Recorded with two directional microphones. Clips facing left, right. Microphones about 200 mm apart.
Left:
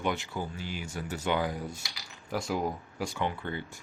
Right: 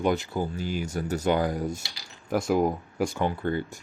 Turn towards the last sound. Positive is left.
turn(degrees=-45)  # may be behind; listen again after turning